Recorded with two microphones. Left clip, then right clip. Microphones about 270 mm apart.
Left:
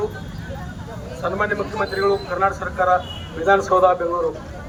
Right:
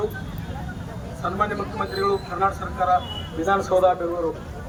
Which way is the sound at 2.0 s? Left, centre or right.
Centre.